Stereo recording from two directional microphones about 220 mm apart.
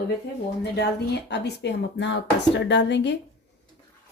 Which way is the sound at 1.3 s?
50° left (ahead or behind).